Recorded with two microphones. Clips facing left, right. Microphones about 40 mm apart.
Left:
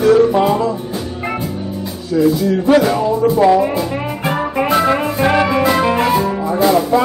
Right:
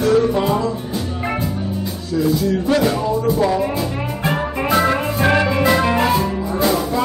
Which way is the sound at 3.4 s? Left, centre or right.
Left.